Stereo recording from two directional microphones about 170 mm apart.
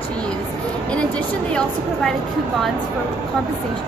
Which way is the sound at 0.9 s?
5° left (ahead or behind).